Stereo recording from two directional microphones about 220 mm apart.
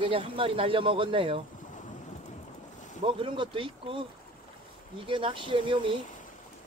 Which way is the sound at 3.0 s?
25° right (ahead or behind).